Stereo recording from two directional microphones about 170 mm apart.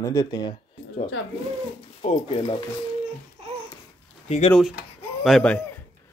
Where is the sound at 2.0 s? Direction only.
35° left (ahead or behind).